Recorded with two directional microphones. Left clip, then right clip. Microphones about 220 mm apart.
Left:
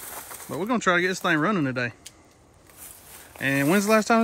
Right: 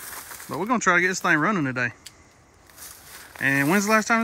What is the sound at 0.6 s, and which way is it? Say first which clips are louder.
Speech: right 2 dB; 5° right (ahead or behind).